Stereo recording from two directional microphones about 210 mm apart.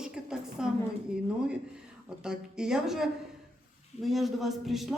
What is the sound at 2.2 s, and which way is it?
Speech, 5° right (ahead or behind).